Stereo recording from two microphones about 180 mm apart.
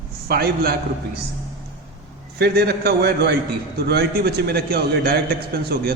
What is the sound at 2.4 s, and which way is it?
A man's voice, 60° right (ahead or behind).